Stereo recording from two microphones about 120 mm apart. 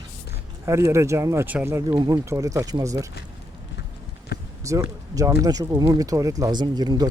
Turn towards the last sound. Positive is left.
turn(degrees=-35)  # may be behind; listen again after turning